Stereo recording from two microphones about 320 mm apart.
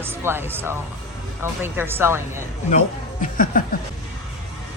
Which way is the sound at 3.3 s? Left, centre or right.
Left.